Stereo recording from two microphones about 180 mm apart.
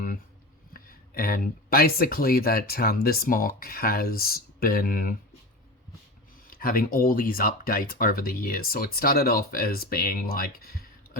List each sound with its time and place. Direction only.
0.7 s speech: 55° left (ahead or behind)
6.5 s speech: 55° left (ahead or behind)